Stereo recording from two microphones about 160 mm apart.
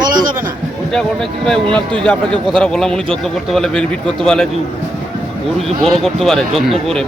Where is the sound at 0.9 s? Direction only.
5° left (ahead or behind).